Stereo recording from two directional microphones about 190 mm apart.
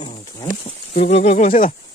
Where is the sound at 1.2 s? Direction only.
35° left (ahead or behind).